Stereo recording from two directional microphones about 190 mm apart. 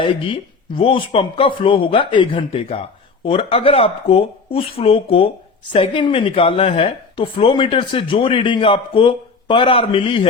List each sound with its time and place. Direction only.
0.0 s speech: 25° left (ahead or behind)